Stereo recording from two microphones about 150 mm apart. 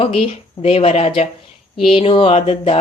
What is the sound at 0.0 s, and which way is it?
Speech, 40° left (ahead or behind).